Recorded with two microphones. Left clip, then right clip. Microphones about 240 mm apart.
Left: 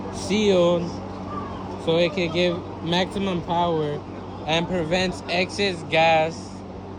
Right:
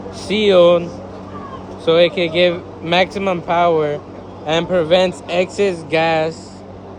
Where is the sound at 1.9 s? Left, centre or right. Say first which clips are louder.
Right 8 dB; right.